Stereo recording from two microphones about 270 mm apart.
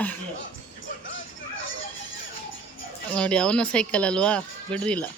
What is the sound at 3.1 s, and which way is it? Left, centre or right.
Speech, centre.